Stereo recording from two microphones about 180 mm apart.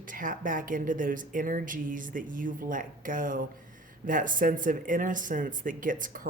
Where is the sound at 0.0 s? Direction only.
50° right (ahead or behind).